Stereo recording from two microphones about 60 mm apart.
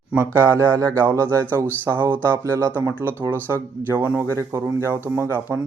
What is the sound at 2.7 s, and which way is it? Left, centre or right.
Speech, right.